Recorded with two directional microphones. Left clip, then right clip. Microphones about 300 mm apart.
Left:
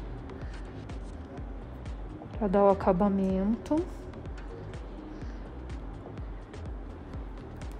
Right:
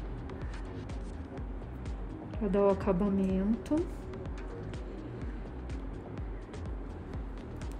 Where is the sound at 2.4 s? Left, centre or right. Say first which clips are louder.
Left 5 dB; left.